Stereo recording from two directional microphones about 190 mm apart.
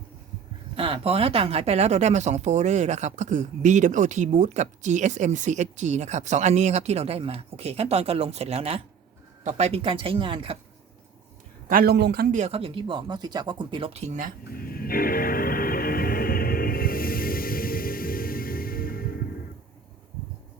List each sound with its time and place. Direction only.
0.8 s speech: 30° right (ahead or behind)
11.7 s speech: 50° right (ahead or behind)
12.3 s speech: 35° right (ahead or behind)
14.6 s music: 50° left (ahead or behind)